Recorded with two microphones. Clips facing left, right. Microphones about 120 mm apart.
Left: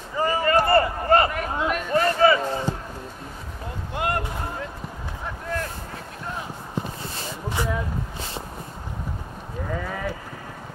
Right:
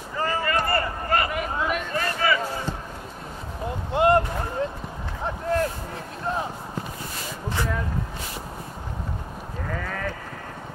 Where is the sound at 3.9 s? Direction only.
25° right (ahead or behind).